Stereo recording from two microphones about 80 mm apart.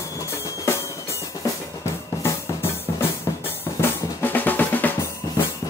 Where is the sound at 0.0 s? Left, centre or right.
Left.